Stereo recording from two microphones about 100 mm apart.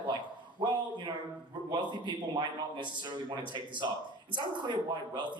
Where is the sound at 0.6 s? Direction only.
50° right (ahead or behind).